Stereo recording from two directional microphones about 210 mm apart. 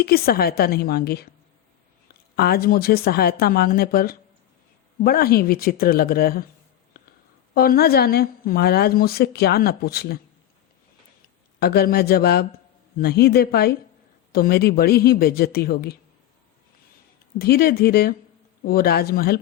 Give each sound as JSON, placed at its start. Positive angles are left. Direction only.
{"t": 0.0, "sound": "a woman's voice", "side_deg": 45}
{"t": 2.3, "sound": "a woman's voice", "side_deg": 45}
{"t": 7.5, "sound": "a woman's voice", "side_deg": 45}
{"t": 11.6, "sound": "a woman's voice", "side_deg": 50}
{"t": 17.3, "sound": "a woman's voice", "side_deg": 45}